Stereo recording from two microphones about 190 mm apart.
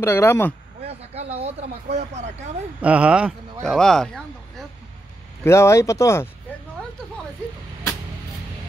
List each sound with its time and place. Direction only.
0.0 s speech: 15° left (ahead or behind)
0.8 s speech: 35° right (ahead or behind)
2.8 s speech: 5° right (ahead or behind)
5.4 s speech: 15° left (ahead or behind)